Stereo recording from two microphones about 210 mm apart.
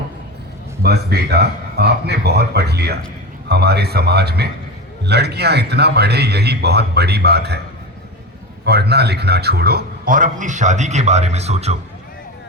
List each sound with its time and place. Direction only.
0.8 s a man's voice: 50° right (ahead or behind)
8.6 s a man's voice: 50° right (ahead or behind); by 11.8 s 30° right (ahead or behind)